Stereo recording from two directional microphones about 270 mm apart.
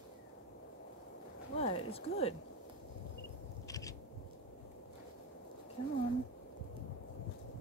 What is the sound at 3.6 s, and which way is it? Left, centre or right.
Scissors, centre.